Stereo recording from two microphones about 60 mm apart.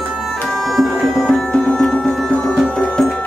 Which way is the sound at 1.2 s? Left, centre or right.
Centre.